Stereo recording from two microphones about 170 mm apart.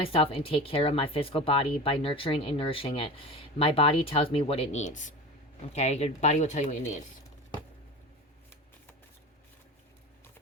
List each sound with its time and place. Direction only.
0.0 s speech: 35° left (ahead or behind)